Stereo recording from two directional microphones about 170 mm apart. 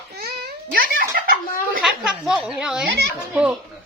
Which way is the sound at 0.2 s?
70° right (ahead or behind).